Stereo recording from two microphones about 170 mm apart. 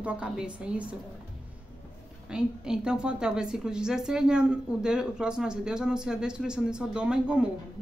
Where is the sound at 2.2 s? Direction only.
5° right (ahead or behind).